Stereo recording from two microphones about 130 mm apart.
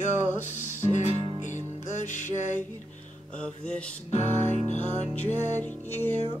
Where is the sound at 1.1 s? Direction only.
45° right (ahead or behind).